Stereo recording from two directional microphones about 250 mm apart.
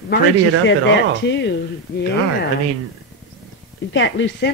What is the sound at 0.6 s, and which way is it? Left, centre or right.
Speech, left.